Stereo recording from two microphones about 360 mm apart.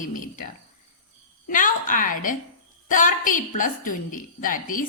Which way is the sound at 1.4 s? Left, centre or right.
Left.